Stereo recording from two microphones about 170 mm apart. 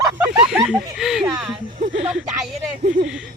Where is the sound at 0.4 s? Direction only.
5° right (ahead or behind).